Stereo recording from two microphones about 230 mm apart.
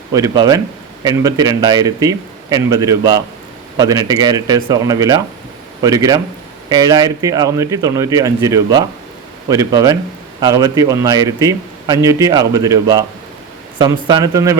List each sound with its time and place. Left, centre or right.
0.1 s a man's voice: centre